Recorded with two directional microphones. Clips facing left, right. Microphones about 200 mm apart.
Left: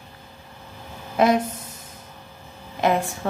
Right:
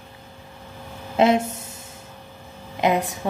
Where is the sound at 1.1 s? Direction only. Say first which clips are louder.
Right 1 dB; 25° right (ahead or behind).